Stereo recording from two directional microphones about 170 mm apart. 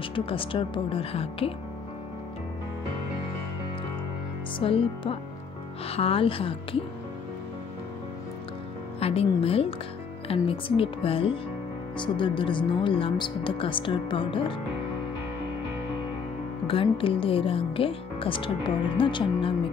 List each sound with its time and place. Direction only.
0.1 s speech: 30° left (ahead or behind)
4.6 s speech: 30° left (ahead or behind)
9.0 s speech: 35° left (ahead or behind)
16.6 s speech: 30° left (ahead or behind)